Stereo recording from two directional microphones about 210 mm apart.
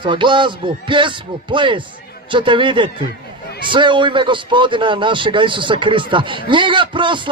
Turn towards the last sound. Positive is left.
turn(degrees=-25)  # may be behind; listen again after turning